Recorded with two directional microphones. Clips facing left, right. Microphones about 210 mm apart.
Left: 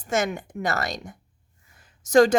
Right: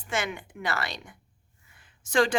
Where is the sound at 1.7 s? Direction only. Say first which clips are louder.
Left 8 dB; 40° left (ahead or behind).